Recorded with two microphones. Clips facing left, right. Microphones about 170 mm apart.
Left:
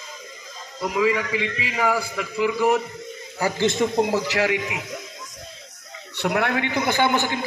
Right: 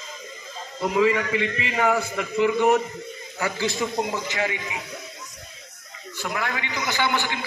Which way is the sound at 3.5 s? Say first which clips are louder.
Left 5 dB; 25° left (ahead or behind).